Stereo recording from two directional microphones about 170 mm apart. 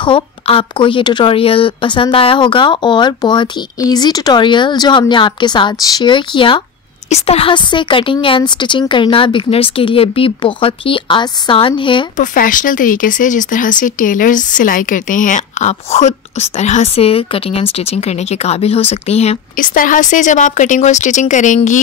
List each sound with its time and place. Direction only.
0.0 s a woman's voice: 30° left (ahead or behind)
12.2 s speech: 50° left (ahead or behind)
19.5 s speech: 55° left (ahead or behind)